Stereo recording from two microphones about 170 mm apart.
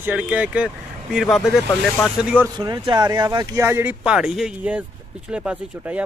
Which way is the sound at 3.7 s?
15° right (ahead or behind).